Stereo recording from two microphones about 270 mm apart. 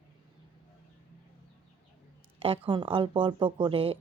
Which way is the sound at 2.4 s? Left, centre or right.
Centre.